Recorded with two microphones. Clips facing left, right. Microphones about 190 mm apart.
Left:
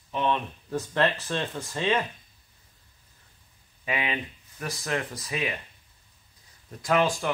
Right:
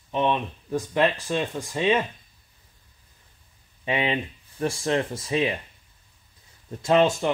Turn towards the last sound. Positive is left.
turn(degrees=-25)  # may be behind; listen again after turning